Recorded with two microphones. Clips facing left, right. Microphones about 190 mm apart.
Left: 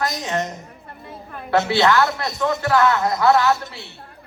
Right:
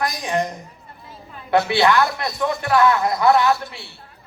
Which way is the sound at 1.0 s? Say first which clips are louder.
Left 5 dB; 60° left (ahead or behind).